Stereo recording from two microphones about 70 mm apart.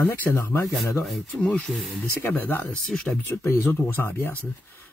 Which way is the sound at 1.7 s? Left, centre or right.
Centre.